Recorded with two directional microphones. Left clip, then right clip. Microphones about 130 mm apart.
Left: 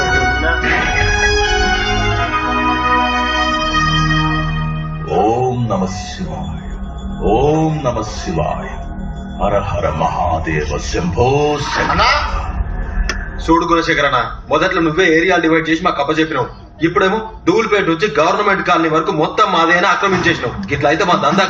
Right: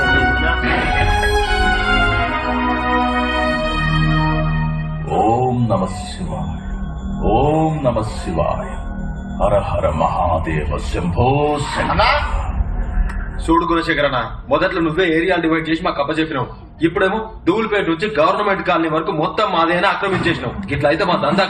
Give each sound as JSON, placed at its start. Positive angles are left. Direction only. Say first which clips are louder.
{"t": 0.0, "sound": "music", "louder": "left 1 dB", "side_deg": -25}
{"t": 0.3, "sound": "music", "louder": "left 2 dB", "side_deg": -40}
{"t": 5.1, "sound": "music", "louder": "left 1 dB", "side_deg": -40}
{"t": 7.2, "sound": "music", "louder": "left 2 dB", "side_deg": -35}
{"t": 9.4, "sound": "a man's voice", "louder": "even", "side_deg": -35}
{"t": 13.5, "sound": "a man's voice", "louder": "left 3 dB", "side_deg": -40}